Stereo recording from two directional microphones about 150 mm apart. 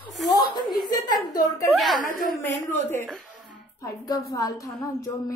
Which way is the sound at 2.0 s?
65° left (ahead or behind).